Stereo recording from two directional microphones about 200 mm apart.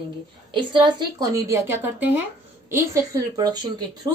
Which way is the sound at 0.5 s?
25° right (ahead or behind).